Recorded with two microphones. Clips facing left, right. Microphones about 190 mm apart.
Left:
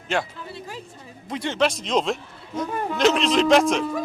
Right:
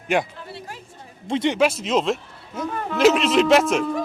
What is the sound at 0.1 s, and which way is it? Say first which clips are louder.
Speech: right 4 dB; 15° right (ahead or behind).